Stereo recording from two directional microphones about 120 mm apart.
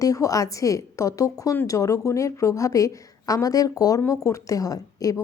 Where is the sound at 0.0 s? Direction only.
30° left (ahead or behind).